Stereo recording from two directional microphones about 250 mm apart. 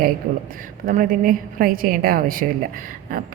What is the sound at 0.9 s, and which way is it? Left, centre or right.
A woman's voice, right.